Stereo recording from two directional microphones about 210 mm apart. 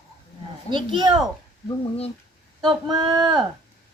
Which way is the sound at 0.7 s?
20° right (ahead or behind).